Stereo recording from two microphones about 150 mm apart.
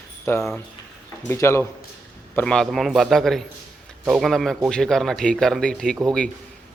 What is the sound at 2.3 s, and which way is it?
A man's voice, 5° left (ahead or behind).